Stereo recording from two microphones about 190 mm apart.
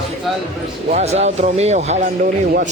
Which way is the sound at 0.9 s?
35° right (ahead or behind).